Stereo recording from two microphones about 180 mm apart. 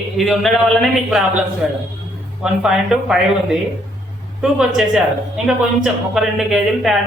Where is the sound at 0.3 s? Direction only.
Centre (ahead or behind).